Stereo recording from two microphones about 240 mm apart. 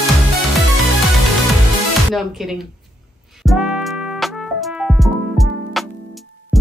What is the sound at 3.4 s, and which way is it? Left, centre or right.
Music, centre.